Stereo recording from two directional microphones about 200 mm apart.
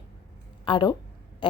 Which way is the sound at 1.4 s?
25° left (ahead or behind).